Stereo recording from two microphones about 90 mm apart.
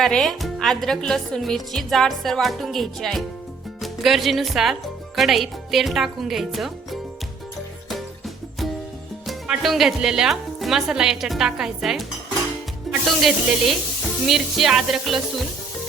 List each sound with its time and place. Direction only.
0.0 s speech: 5° left (ahead or behind)
9.2 s speech: 5° right (ahead or behind)